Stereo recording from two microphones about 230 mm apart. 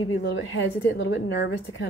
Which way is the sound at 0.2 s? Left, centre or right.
Left.